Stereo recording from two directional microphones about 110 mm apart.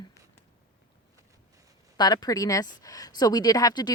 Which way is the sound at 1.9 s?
40° left (ahead or behind).